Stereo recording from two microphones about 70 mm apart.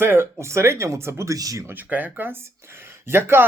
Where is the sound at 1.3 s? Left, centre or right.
Right.